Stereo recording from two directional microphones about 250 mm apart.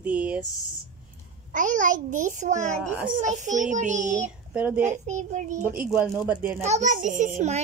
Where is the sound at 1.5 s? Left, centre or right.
Right.